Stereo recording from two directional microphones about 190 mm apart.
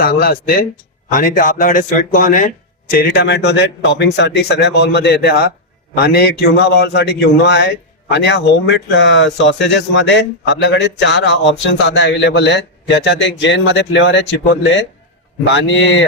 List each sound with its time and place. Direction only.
0.0 s a man's voice: 55° left (ahead or behind); by 16.0 s 75° left (ahead or behind)